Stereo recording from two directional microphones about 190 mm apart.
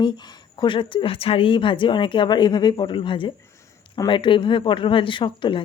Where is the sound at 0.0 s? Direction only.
25° left (ahead or behind).